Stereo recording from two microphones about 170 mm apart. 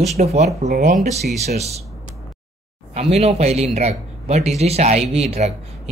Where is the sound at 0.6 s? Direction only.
70° right (ahead or behind).